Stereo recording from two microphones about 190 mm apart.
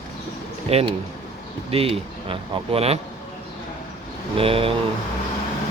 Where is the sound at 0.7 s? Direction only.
30° right (ahead or behind).